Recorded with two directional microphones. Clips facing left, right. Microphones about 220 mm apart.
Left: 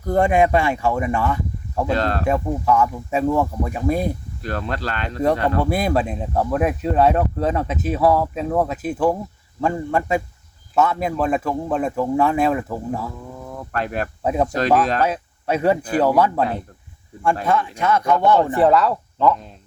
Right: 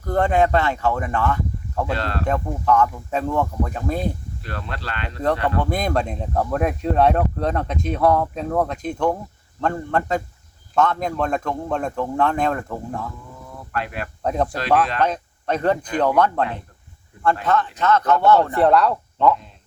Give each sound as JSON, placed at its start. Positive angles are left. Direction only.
{"t": 0.0, "sound": "speech", "side_deg": 10}
{"t": 1.9, "sound": "speech", "side_deg": 45}
{"t": 2.2, "sound": "speech", "side_deg": 10}
{"t": 4.4, "sound": "speech", "side_deg": 40}
{"t": 5.6, "sound": "speech", "side_deg": 5}
{"t": 13.5, "sound": "a sound", "side_deg": 45}
{"t": 15.0, "sound": "speech", "side_deg": 5}
{"t": 18.5, "sound": "speech", "side_deg": 0}